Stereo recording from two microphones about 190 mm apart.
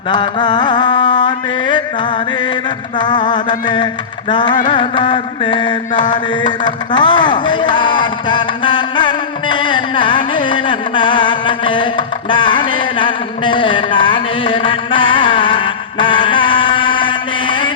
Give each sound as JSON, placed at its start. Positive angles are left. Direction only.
{"t": 0.1, "sound": "mantra", "side_deg": 25}
{"t": 3.0, "sound": "mantra", "side_deg": 25}
{"t": 6.0, "sound": "a sound", "side_deg": 25}